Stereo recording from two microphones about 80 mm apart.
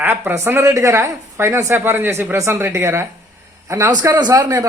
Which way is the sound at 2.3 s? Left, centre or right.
Right.